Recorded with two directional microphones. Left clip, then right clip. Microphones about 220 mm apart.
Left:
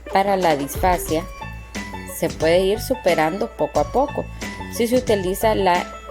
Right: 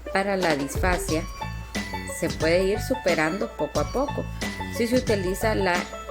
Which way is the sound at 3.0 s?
25° left (ahead or behind).